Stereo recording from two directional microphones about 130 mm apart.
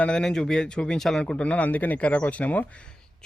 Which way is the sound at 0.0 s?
5° left (ahead or behind).